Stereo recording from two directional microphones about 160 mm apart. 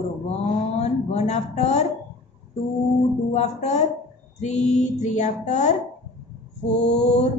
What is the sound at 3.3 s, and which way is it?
Speech, 45° left (ahead or behind).